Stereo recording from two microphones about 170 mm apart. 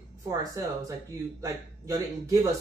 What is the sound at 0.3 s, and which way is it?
A man's voice, 20° right (ahead or behind).